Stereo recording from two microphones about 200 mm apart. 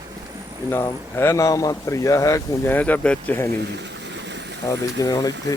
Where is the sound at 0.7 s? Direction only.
10° left (ahead or behind).